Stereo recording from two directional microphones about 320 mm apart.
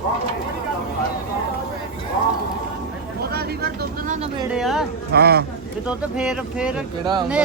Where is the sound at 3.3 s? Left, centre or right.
Right.